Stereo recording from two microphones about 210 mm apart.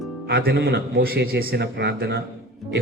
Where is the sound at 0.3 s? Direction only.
50° right (ahead or behind).